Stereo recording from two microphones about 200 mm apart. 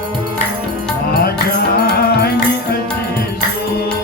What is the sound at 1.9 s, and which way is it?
Music, 50° left (ahead or behind).